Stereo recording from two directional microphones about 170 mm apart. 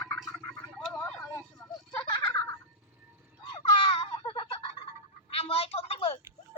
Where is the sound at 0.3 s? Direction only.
5° left (ahead or behind).